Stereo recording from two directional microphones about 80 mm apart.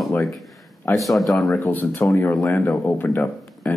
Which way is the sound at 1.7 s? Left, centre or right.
Left.